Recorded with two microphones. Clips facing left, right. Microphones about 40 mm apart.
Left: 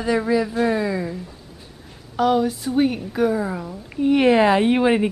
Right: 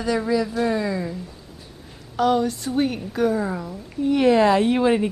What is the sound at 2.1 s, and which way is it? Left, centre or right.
A woman's voice, centre.